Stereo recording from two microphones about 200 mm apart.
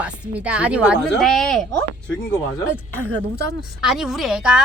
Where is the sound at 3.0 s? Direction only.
70° right (ahead or behind).